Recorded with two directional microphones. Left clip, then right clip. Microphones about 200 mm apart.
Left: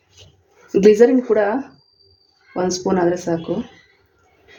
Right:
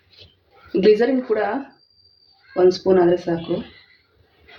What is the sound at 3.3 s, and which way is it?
Speech, 25° left (ahead or behind).